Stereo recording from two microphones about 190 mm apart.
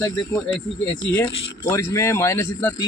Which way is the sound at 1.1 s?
15° left (ahead or behind).